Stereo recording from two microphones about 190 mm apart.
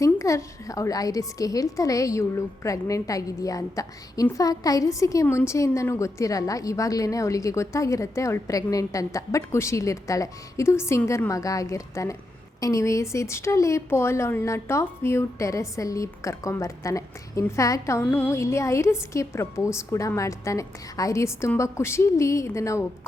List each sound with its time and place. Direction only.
0.0 s a woman's voice: 15° left (ahead or behind)